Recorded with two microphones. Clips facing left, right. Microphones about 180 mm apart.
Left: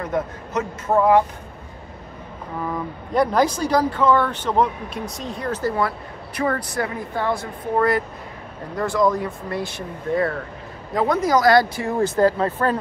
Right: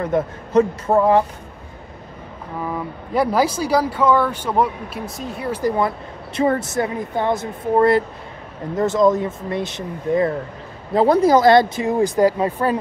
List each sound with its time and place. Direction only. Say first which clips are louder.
0.0 s speech: right 4 dB; 30° right (ahead or behind)
2.7 s speech: right 1 dB; 5° right (ahead or behind)
11.0 s speech: right 5 dB; 30° right (ahead or behind); by 12.7 s 15° right (ahead or behind)